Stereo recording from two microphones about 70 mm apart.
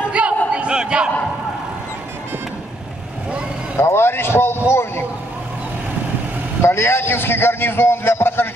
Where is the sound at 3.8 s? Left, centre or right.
Left.